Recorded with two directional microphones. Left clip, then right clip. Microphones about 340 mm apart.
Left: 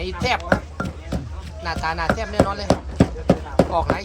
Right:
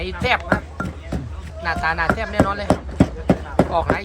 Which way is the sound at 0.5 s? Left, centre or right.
Centre.